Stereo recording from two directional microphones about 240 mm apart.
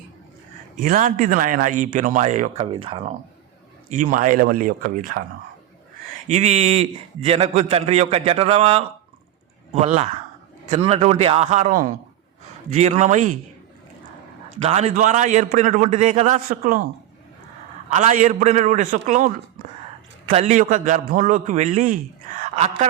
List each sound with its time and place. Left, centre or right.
0.8 s a man's voice: right
6.2 s a man's voice: right
14.6 s a man's voice: right
17.9 s a man's voice: right
20.3 s a man's voice: right
22.4 s a sound: right